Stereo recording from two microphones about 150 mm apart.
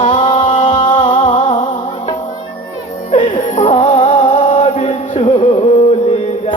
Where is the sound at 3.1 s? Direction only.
50° left (ahead or behind).